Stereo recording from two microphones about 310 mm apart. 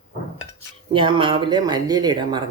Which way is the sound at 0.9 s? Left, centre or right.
Centre.